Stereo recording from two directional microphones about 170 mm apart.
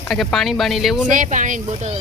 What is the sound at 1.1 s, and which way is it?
Speech, 50° right (ahead or behind).